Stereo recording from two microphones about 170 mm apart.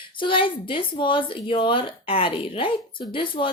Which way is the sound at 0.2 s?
30° left (ahead or behind).